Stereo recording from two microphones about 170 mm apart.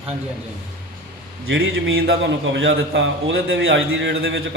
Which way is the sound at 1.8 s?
90° right.